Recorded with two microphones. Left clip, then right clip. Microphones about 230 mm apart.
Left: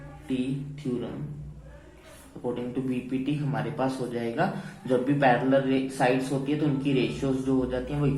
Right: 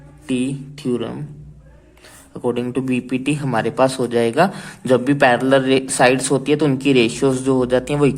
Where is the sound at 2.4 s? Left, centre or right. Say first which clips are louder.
Right 10 dB; right.